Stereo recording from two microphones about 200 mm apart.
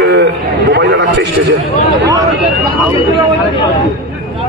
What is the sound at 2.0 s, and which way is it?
Speech, 15° right (ahead or behind).